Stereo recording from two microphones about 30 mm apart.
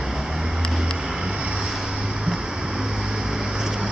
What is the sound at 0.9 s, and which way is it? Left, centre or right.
Vehicle, right.